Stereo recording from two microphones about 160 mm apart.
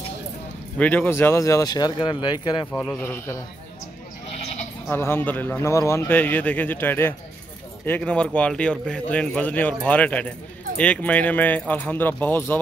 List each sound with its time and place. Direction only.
0.7 s speech: 10° left (ahead or behind); by 2.7 s 30° left (ahead or behind)
2.9 s a man's voice: 15° left (ahead or behind)
4.8 s a man's voice: 15° left (ahead or behind)